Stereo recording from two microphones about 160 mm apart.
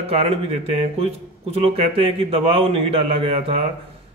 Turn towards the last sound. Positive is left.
turn(degrees=-35)  # may be behind; listen again after turning